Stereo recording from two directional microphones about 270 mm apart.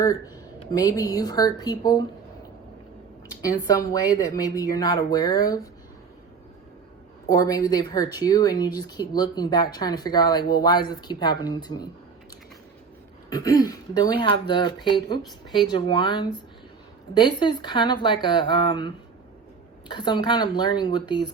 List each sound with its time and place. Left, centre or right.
0.7 s a woman's voice: centre
3.4 s a woman's voice: centre
7.3 s a woman's voice: centre
13.3 s a woman's voice: centre
19.9 s a woman's voice: centre